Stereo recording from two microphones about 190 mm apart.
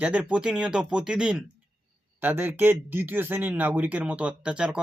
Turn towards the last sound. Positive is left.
turn(degrees=-5)  # may be behind; listen again after turning